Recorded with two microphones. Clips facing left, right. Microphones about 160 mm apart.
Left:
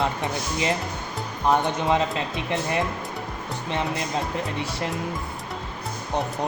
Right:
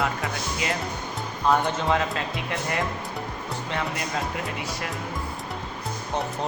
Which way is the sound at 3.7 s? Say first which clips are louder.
Left 3 dB; 20° left (ahead or behind).